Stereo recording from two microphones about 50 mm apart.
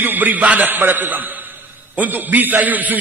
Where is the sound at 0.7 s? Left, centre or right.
Right.